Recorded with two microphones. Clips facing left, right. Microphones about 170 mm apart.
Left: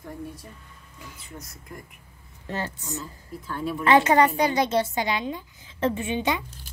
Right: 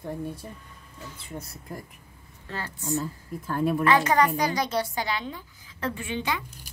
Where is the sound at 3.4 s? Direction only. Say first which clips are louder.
Right 5 dB; 45° right (ahead or behind).